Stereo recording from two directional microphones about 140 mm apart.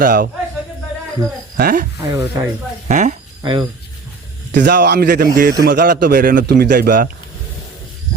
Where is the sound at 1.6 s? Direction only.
75° right (ahead or behind).